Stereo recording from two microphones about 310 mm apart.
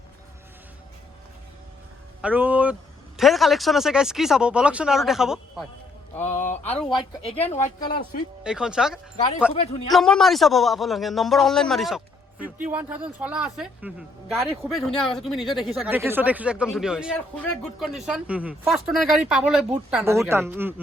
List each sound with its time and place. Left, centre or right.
2.2 s speech: centre
6.3 s a sound: left
6.7 s speech: centre
7.3 s a man's voice: centre
8.4 s speech: centre
9.5 s a man's voice: left
9.9 s speech: centre